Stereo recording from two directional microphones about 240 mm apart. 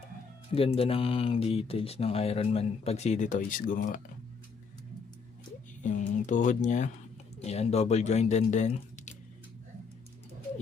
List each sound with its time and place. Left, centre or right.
0.5 s speech: left
5.8 s speech: left